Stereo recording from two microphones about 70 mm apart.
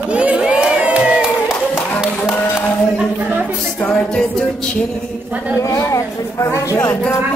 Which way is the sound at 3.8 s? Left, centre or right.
Centre.